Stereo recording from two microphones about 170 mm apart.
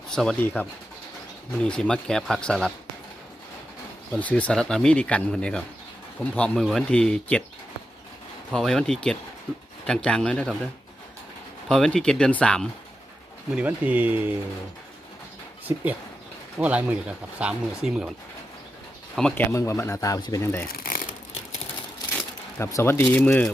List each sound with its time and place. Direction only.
0.1 s speech: 5° left (ahead or behind)
4.2 s speech: 10° left (ahead or behind)
8.5 s speech: 5° left (ahead or behind)
11.7 s speech: 5° left (ahead or behind)
13.6 s speech: 10° right (ahead or behind)
15.6 s speech: 10° right (ahead or behind)
19.1 s speech: 5° left (ahead or behind)
20.7 s crumpling: 55° left (ahead or behind)
22.1 s a sound: 10° left (ahead or behind)
22.7 s speech: 15° left (ahead or behind)